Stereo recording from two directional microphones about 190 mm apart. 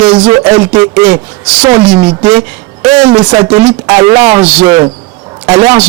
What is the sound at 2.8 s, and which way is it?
A man's voice, 25° right (ahead or behind).